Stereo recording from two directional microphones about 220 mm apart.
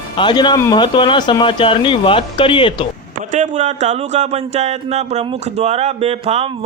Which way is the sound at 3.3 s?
35° right (ahead or behind).